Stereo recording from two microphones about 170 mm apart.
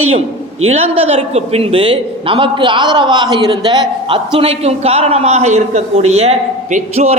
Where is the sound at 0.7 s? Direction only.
35° right (ahead or behind).